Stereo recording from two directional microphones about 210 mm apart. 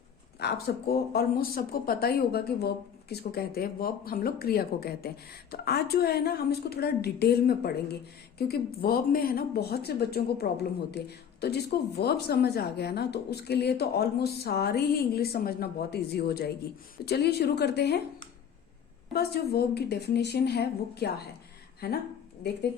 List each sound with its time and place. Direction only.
0.3 s a woman's voice: 50° left (ahead or behind)
19.1 s a woman's voice: 50° left (ahead or behind)